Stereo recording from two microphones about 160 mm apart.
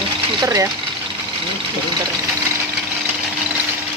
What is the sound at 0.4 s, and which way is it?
Speech, 20° right (ahead or behind).